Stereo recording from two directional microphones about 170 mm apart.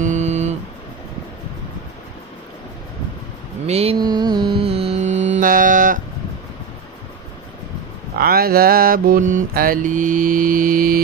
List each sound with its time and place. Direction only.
0.0 s music: 45° right (ahead or behind)
3.6 s mantra: 40° right (ahead or behind)
4.0 s music: 25° right (ahead or behind)
5.4 s mantra: 50° right (ahead or behind)
8.2 s mantra: 60° right (ahead or behind)